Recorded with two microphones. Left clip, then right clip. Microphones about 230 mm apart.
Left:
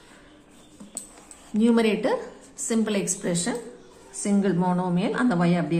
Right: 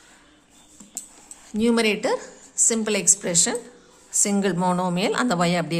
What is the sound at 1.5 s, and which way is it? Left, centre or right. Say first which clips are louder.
A woman's voice: right 1 dB; right.